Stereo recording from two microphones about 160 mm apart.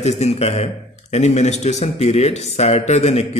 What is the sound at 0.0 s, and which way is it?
A man's voice, 45° left (ahead or behind).